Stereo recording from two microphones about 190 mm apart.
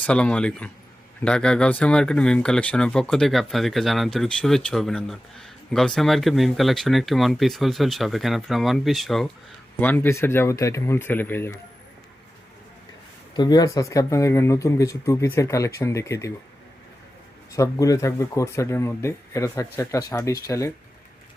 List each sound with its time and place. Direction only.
0.0 s speech: 5° left (ahead or behind)
13.3 s speech: 20° left (ahead or behind)
17.5 s speech: 15° left (ahead or behind)